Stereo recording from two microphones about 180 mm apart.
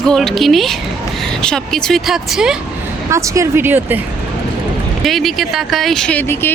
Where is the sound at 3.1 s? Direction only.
15° right (ahead or behind).